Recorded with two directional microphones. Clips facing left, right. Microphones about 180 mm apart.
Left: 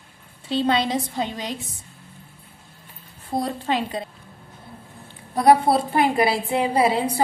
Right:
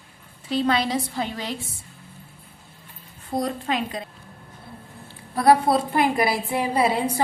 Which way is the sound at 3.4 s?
30° left (ahead or behind).